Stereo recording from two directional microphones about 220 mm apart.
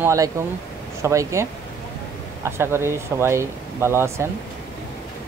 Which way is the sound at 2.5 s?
10° right (ahead or behind).